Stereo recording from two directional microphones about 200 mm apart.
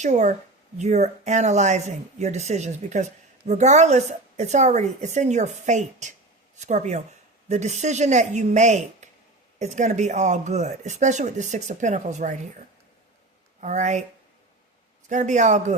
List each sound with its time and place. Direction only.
0.0 s speech: 35° right (ahead or behind)
13.6 s speech: 35° right (ahead or behind)
15.1 s speech: 35° right (ahead or behind)